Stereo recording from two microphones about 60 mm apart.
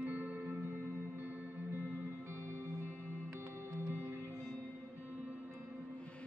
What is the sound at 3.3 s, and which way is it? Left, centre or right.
Music, right.